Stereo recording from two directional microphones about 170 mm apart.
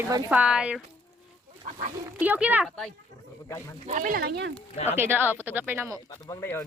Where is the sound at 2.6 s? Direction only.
Centre (ahead or behind).